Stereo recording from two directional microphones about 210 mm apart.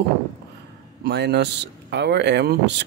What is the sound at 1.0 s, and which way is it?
Speech, 50° right (ahead or behind).